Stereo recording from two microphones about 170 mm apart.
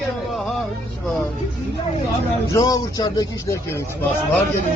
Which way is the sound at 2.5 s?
20° left (ahead or behind).